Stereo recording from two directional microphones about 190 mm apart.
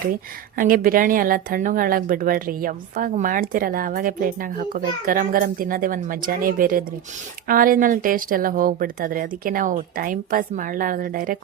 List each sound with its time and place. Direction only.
0.5 s speech: 45° right (ahead or behind)